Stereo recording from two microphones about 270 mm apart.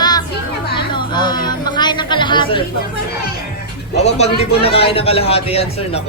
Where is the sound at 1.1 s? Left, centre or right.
Centre.